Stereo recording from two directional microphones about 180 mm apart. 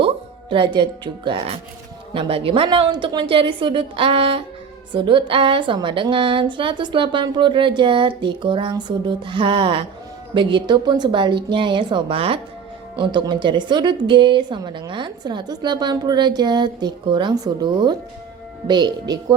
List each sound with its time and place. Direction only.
0.5 s a woman's voice: 25° right (ahead or behind)